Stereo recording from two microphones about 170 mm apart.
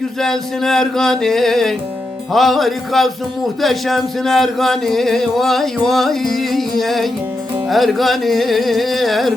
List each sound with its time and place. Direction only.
0.2 s music: centre (ahead or behind)